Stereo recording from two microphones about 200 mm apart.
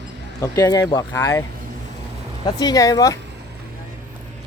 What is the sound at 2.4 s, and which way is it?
Speech, 20° left (ahead or behind).